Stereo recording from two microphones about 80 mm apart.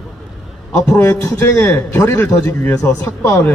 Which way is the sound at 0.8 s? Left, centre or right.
Left.